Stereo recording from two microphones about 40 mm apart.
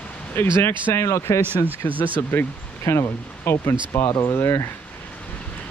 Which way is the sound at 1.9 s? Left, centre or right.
Right.